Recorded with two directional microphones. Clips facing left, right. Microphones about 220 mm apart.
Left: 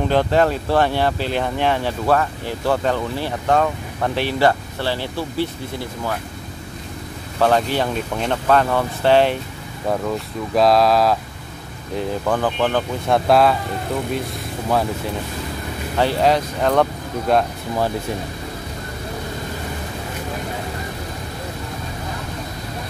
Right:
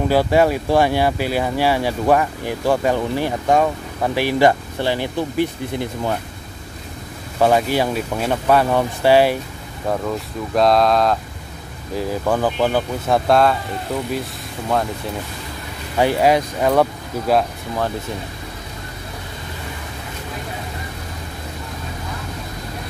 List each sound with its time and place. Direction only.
0.1 s speech: 10° right (ahead or behind)
7.3 s speech: 10° right (ahead or behind)
9.8 s speech: centre (ahead or behind)
12.0 s speech: 10° right (ahead or behind)
16.0 s speech: 10° right (ahead or behind)